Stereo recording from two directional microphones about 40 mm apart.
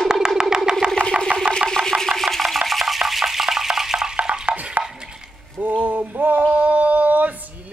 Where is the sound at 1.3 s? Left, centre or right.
Right.